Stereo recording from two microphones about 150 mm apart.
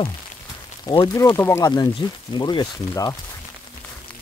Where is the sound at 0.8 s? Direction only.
25° left (ahead or behind).